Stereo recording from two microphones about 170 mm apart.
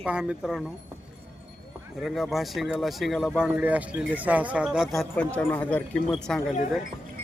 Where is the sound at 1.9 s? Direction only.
Centre (ahead or behind).